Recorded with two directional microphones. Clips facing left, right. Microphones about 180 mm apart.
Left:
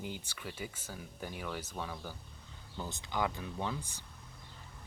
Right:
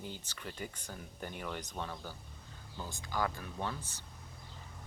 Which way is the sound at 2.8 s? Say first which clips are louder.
Left 1 dB; 20° left (ahead or behind).